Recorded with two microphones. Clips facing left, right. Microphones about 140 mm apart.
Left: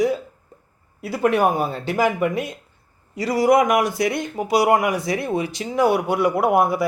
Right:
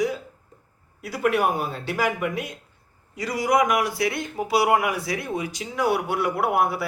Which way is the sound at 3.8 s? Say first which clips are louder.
Left 4 dB; 20° left (ahead or behind).